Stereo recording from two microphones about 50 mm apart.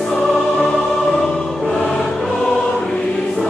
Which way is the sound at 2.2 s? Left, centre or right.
Centre.